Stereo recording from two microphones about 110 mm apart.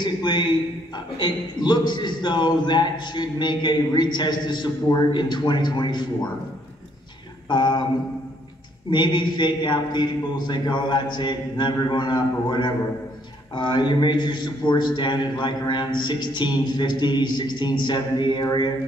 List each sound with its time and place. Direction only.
0.0 s a man's voice: 45° left (ahead or behind)
7.4 s a man's voice: 45° left (ahead or behind)
8.9 s a man's voice: 45° left (ahead or behind)